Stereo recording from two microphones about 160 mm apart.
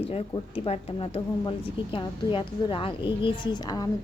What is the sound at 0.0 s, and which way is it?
Speech, 40° left (ahead or behind).